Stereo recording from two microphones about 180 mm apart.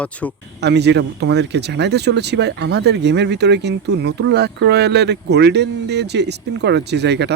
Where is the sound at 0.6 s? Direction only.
70° right (ahead or behind).